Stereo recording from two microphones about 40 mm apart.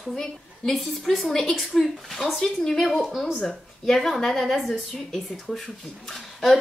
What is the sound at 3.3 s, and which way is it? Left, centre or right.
Speech, left.